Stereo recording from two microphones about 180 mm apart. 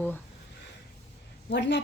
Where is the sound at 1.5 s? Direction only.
75° left (ahead or behind).